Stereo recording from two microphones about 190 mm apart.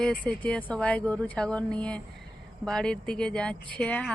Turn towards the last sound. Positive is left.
turn(degrees=5)  # may be behind; listen again after turning